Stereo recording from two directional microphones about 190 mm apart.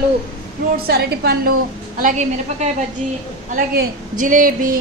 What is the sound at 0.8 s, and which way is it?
Speech, 55° right (ahead or behind).